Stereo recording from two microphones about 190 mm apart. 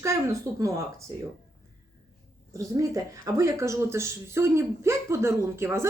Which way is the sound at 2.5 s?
15° right (ahead or behind).